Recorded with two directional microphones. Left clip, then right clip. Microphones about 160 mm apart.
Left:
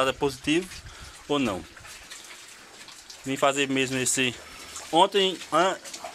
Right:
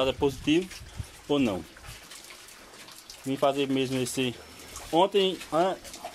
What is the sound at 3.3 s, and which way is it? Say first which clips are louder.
Speech: left 2 dB; 10° right (ahead or behind).